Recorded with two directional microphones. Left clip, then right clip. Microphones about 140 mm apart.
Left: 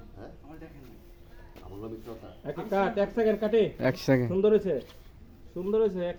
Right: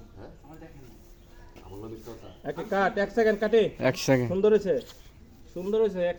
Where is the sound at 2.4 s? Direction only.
15° right (ahead or behind).